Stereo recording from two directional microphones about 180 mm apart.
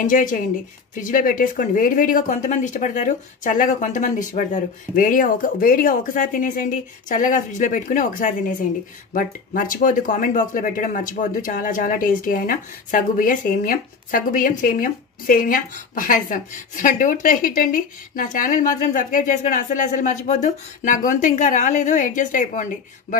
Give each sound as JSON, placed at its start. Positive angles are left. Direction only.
{"t": 0.0, "sound": "speech", "side_deg": 50}